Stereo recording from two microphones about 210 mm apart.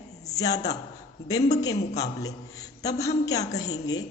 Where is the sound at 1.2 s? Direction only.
15° left (ahead or behind).